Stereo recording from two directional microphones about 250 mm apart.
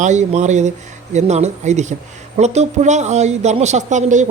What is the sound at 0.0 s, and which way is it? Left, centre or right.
Speech, right.